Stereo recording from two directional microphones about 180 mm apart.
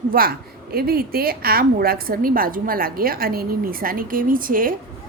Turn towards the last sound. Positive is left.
turn(degrees=-50)  # may be behind; listen again after turning